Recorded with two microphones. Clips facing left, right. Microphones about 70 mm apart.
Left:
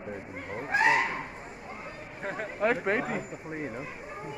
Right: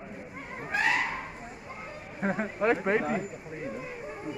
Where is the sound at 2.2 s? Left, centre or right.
Right.